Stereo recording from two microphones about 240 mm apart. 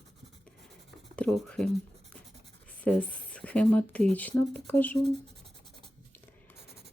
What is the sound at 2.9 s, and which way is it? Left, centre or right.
Speech, centre.